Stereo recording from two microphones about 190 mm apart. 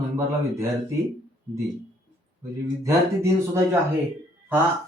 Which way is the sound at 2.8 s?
15° right (ahead or behind).